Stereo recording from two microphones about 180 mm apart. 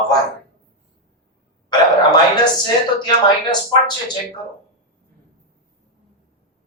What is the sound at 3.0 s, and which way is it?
Speech, 25° left (ahead or behind).